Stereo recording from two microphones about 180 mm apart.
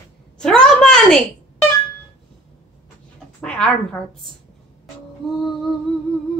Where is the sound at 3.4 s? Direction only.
5° left (ahead or behind).